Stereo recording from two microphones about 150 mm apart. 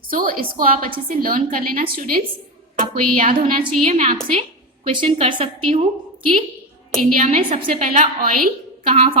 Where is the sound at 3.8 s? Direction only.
50° right (ahead or behind).